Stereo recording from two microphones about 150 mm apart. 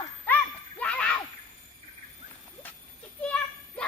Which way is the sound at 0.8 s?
5° left (ahead or behind).